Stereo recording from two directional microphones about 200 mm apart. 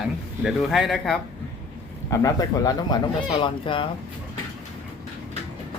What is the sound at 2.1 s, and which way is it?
Speech, 15° left (ahead or behind).